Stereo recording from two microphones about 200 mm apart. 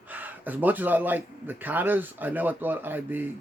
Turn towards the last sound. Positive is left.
turn(degrees=-10)  # may be behind; listen again after turning